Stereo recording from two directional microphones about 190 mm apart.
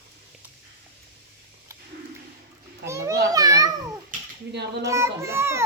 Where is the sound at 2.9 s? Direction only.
15° right (ahead or behind).